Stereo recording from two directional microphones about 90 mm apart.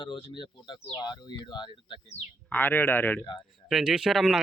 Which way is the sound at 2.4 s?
20° left (ahead or behind).